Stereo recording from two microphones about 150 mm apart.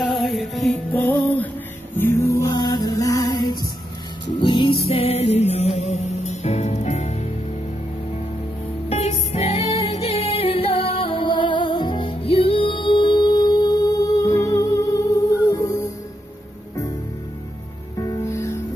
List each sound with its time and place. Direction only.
0.0 s music: centre (ahead or behind)
1.0 s music: 10° left (ahead or behind); by 7.2 s 50° left (ahead or behind)
8.8 s music: 45° left (ahead or behind); by 15.9 s 20° left (ahead or behind)
17.9 s music: 20° left (ahead or behind)